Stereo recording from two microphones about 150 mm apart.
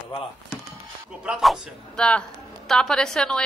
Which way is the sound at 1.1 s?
5° right (ahead or behind).